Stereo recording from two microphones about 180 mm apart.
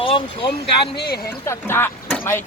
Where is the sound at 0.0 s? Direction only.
30° left (ahead or behind).